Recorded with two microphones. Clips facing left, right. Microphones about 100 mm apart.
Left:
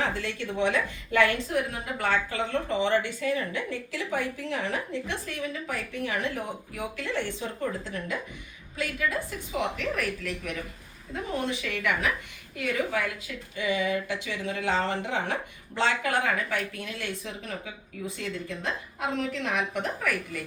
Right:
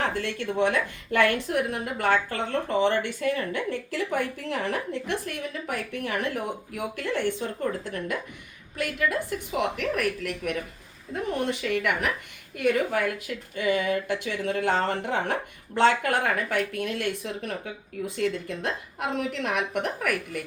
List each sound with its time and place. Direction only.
0.0 s a woman's voice: 55° right (ahead or behind)